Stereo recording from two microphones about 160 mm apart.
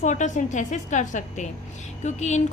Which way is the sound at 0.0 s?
50° left (ahead or behind).